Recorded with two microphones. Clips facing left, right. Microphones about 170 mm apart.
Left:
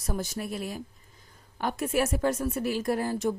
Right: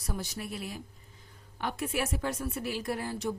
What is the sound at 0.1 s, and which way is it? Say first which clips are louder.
A woman's voice: left 5 dB; 45° left (ahead or behind).